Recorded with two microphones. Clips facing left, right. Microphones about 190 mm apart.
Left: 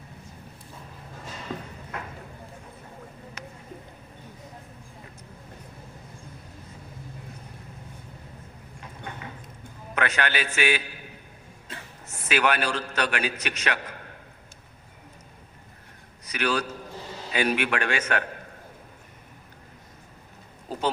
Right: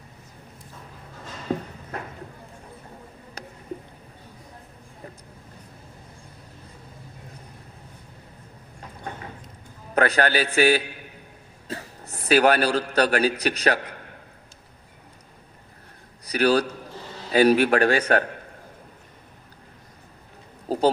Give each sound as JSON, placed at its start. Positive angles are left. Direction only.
{"t": 1.5, "sound": "a man's voice", "side_deg": -40}
{"t": 9.9, "sound": "a man's voice", "side_deg": -35}
{"t": 16.2, "sound": "a man's voice", "side_deg": -35}
{"t": 20.7, "sound": "owl", "side_deg": -40}